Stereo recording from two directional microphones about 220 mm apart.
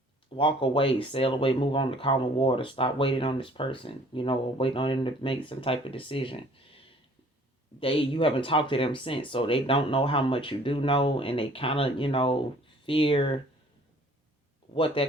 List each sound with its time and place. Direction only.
0.3 s speech: 25° left (ahead or behind)
15.0 s speech: 20° left (ahead or behind)